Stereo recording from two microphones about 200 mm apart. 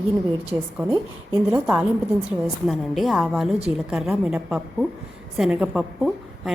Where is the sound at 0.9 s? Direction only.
20° right (ahead or behind).